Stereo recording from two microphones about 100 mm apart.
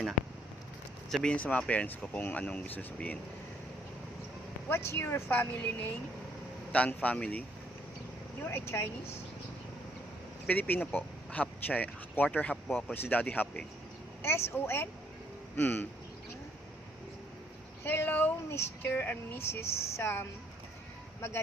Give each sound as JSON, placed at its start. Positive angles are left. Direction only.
{"t": 1.1, "sound": "speech", "side_deg": 10}
{"t": 4.7, "sound": "speech", "side_deg": 25}
{"t": 8.4, "sound": "speech", "side_deg": 25}
{"t": 10.4, "sound": "speech", "side_deg": 15}
{"t": 17.8, "sound": "speech", "side_deg": 20}